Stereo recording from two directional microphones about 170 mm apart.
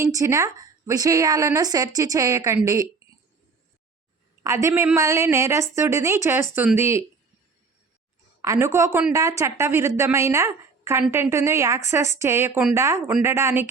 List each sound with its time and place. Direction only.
0.0 s a woman's voice: 20° right (ahead or behind)
3.0 s a sound: 20° right (ahead or behind)
4.4 s a woman's voice: 15° right (ahead or behind)
8.4 s a woman's voice: 15° right (ahead or behind)